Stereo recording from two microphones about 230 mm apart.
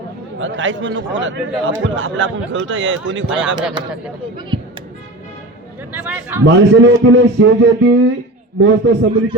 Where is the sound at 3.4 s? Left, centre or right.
Centre.